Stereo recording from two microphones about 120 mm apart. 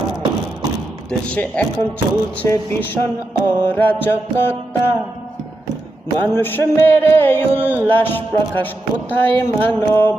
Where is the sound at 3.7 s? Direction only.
15° left (ahead or behind).